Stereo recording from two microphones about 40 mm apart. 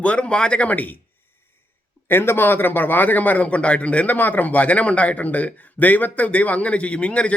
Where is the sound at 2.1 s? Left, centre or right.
Left.